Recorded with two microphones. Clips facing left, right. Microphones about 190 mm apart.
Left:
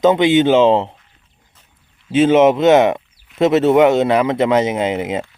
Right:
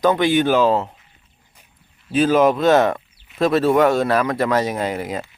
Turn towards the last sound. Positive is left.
turn(degrees=20)  # may be behind; listen again after turning